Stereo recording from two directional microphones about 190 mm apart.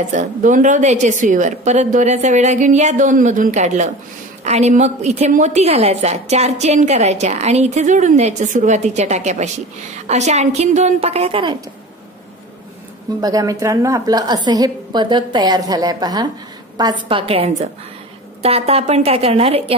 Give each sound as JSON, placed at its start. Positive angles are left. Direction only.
{"t": 0.1, "sound": "a woman's voice", "side_deg": -45}
{"t": 13.2, "sound": "a woman's voice", "side_deg": -20}